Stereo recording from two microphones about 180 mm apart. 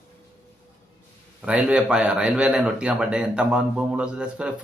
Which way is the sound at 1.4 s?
5° right (ahead or behind).